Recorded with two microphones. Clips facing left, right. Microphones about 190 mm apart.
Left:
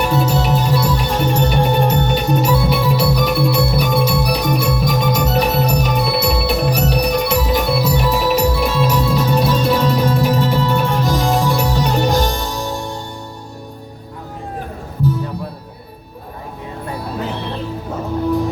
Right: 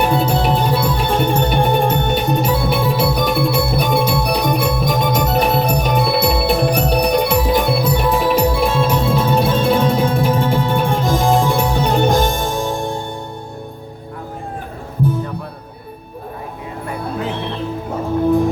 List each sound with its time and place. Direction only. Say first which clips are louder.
0.0 s music: right 1 dB; 55° right (ahead or behind)